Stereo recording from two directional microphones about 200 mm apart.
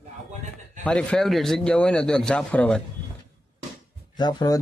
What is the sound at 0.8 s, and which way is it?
Speech, 5° left (ahead or behind).